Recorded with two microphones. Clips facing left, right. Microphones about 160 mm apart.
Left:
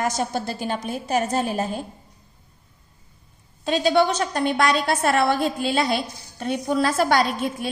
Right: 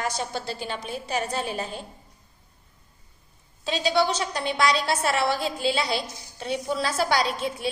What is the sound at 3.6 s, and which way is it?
A woman's voice, 55° left (ahead or behind).